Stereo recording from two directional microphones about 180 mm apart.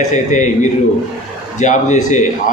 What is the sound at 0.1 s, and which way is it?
A man's voice, 40° left (ahead or behind).